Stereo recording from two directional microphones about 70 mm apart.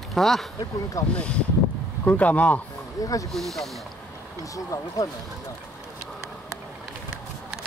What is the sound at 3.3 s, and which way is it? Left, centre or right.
Speech, centre.